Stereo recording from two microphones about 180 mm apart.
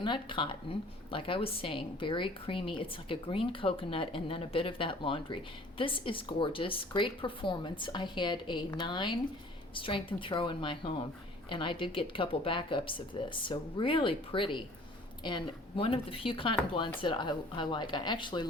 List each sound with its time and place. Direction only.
0.0 s a woman's voice: 25° left (ahead or behind)